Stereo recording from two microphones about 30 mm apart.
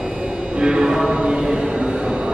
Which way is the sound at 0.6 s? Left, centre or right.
Centre.